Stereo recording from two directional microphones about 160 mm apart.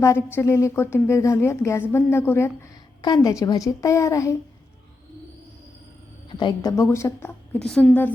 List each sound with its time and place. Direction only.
0.0 s a woman's voice: 15° left (ahead or behind)
6.2 s a woman's voice: 30° left (ahead or behind)
7.6 s a woman's voice: 5° left (ahead or behind)